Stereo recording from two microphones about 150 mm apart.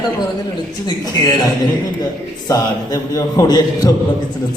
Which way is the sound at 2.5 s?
25° left (ahead or behind).